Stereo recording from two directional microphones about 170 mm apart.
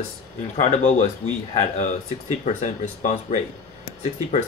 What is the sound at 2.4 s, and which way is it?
Speech, 45° left (ahead or behind).